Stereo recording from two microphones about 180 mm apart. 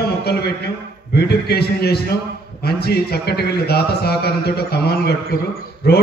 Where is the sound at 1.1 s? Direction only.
65° left (ahead or behind).